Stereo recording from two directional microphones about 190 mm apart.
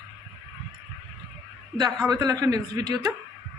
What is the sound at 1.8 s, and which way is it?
A woman's voice, 20° right (ahead or behind).